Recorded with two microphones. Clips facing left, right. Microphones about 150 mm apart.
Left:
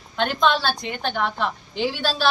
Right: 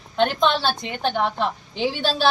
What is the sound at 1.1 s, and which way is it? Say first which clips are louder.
Speech: right 1 dB; 35° right (ahead or behind).